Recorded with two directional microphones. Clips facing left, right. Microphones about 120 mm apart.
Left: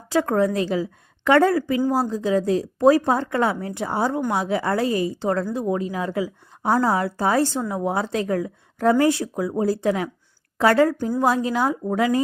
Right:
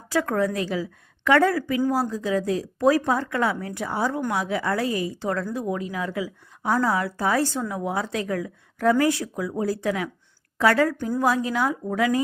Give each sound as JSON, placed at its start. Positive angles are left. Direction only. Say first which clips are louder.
{"t": 0.1, "sound": "a woman's voice", "louder": "left 3 dB", "side_deg": 25}